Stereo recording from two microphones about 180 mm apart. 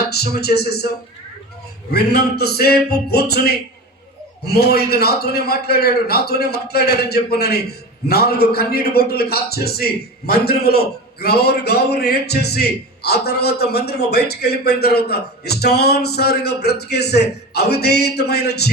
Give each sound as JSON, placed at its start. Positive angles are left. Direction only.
{"t": 0.0, "sound": "a man's voice", "side_deg": 65}
{"t": 1.9, "sound": "a man's voice", "side_deg": 60}